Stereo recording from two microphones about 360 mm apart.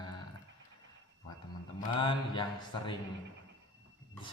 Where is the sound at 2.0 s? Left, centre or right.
Centre.